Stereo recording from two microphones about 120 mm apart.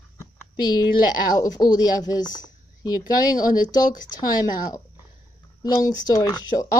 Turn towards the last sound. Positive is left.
turn(degrees=30)  # may be behind; listen again after turning